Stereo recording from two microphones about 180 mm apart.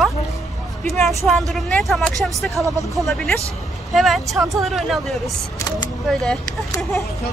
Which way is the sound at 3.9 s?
Centre (ahead or behind).